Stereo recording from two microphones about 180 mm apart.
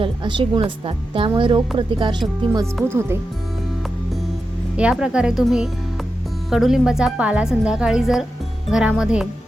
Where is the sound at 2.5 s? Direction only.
15° right (ahead or behind).